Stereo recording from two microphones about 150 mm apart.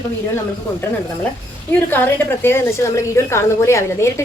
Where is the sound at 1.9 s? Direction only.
15° left (ahead or behind).